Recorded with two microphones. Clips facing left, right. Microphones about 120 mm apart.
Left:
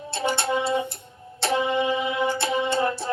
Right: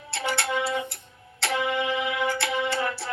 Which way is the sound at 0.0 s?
25° left (ahead or behind).